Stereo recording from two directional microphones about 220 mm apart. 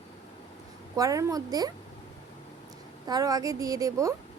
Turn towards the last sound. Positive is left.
turn(degrees=-15)  # may be behind; listen again after turning